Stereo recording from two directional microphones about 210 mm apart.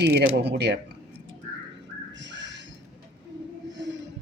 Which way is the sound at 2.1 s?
60° right (ahead or behind).